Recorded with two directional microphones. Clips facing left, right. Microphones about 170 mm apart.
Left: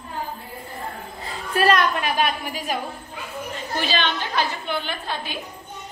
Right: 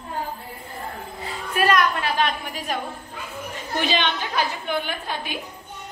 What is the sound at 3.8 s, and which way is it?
A woman's voice, 15° right (ahead or behind).